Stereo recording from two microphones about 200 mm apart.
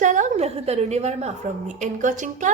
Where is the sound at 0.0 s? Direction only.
40° right (ahead or behind).